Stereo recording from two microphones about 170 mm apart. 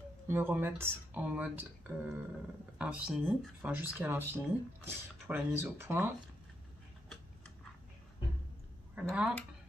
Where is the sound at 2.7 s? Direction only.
5° right (ahead or behind).